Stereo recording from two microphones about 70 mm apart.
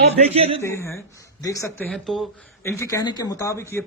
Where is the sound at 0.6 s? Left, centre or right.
Left.